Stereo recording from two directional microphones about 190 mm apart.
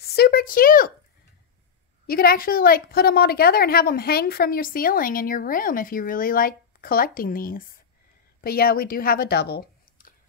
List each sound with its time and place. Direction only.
0.0 s speech: 55° left (ahead or behind)
2.0 s a woman's voice: 50° left (ahead or behind)